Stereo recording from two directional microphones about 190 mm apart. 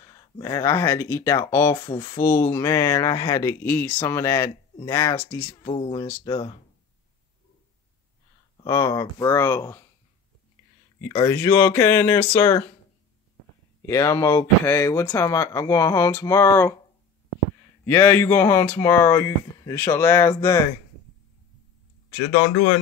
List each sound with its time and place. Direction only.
0.0 s speech: 20° left (ahead or behind)
5.6 s speech: 25° left (ahead or behind)
8.6 s speech: 15° left (ahead or behind)
11.2 s speech: 10° left (ahead or behind)
13.8 s speech: 15° left (ahead or behind)
17.8 s speech: 10° left (ahead or behind)